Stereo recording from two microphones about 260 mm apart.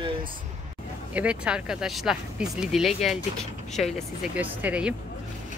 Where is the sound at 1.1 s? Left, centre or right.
Centre.